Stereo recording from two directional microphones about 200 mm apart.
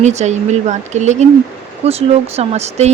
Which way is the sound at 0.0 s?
35° right (ahead or behind).